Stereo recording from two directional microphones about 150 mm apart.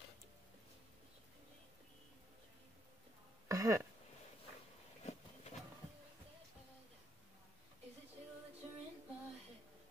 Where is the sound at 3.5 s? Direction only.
20° right (ahead or behind).